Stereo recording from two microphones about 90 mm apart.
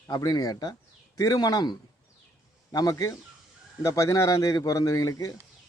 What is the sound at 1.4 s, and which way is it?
Speech, 50° left (ahead or behind).